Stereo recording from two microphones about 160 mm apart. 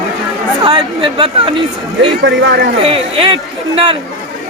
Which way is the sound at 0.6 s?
30° right (ahead or behind).